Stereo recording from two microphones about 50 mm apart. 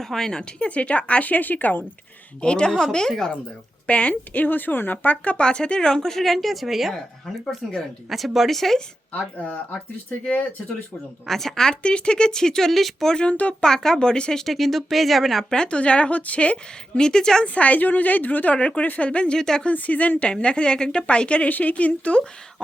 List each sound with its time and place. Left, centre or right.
0.0 s a woman's voice: centre; by 1.8 s left
2.4 s speech: centre
3.8 s a woman's voice: left
4.1 s a woman's voice: left
5.2 s a woman's voice: left
5.5 s speech: centre
9.1 s a woman's voice: left
11.3 s speech: centre
11.7 s speech: left; by 13.1 s centre
13.1 s speech: left
14.4 s speech: centre
17.4 s a woman's voice: left
19.4 s speech: centre
19.6 s a woman's voice: left